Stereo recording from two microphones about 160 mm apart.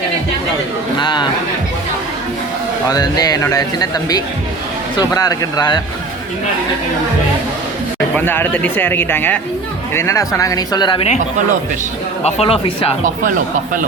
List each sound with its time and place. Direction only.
0.9 s a man's voice: 30° left (ahead or behind)
2.8 s a man's voice: 25° left (ahead or behind)
8.1 s a man's voice: 15° left (ahead or behind)
12.2 s speech: 40° left (ahead or behind)